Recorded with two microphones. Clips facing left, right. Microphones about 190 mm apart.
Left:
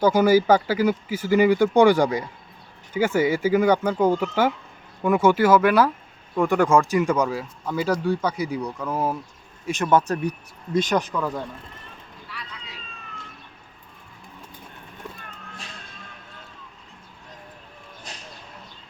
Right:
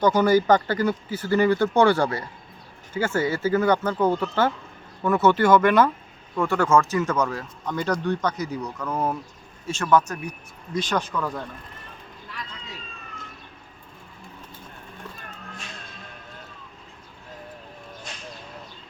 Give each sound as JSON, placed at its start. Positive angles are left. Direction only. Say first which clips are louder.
{"t": 0.0, "sound": "speech", "louder": "left 2 dB", "side_deg": 10}
{"t": 6.3, "sound": "speech", "louder": "left 2 dB", "side_deg": 15}
{"t": 9.6, "sound": "speech", "louder": "left 1 dB", "side_deg": 20}
{"t": 10.0, "sound": "speech", "louder": "left 7 dB", "side_deg": 35}
{"t": 10.8, "sound": "speech", "louder": "left 3 dB", "side_deg": 20}
{"t": 12.3, "sound": "vehicle", "louder": "right 1 dB", "side_deg": -45}
{"t": 18.1, "sound": "a sound", "louder": "left 3 dB", "side_deg": 35}